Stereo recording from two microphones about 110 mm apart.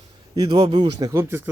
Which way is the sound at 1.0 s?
25° right (ahead or behind).